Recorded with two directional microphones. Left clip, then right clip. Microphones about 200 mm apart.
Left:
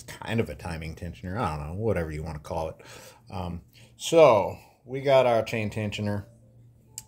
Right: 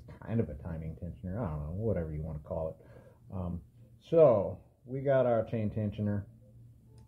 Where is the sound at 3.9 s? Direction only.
25° left (ahead or behind).